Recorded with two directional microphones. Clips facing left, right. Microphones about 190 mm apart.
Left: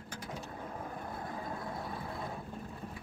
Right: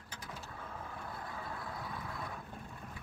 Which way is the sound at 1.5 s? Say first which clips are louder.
Left 4 dB; 25° left (ahead or behind).